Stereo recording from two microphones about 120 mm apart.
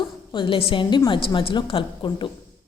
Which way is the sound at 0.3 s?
45° left (ahead or behind).